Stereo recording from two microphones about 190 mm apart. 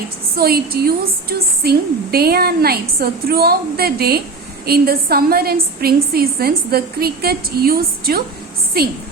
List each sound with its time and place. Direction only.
0.3 s a woman's voice: 55° right (ahead or behind)